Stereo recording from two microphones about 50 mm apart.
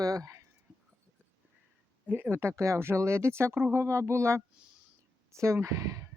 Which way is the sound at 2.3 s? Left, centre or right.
Right.